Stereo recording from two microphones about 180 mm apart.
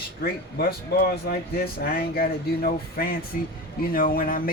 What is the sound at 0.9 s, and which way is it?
Speech, 60° left (ahead or behind).